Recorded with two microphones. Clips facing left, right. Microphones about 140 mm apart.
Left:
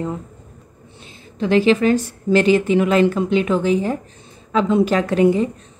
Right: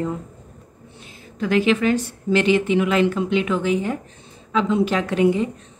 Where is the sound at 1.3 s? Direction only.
30° left (ahead or behind).